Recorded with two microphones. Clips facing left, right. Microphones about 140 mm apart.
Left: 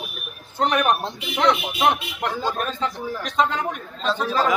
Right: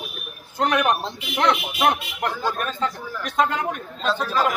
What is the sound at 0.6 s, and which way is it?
Speech, centre (ahead or behind).